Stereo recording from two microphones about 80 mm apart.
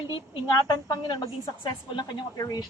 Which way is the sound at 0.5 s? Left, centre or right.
Left.